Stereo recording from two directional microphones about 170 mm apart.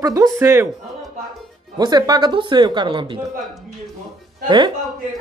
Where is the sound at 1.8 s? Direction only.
25° right (ahead or behind).